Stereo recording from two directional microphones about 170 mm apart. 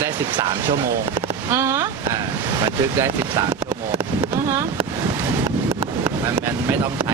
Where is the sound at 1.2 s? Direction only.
15° right (ahead or behind).